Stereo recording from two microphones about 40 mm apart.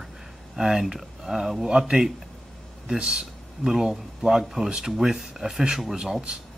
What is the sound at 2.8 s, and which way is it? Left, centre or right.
Speech, centre.